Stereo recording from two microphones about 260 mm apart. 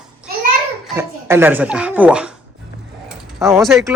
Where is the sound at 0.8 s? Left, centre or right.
Centre.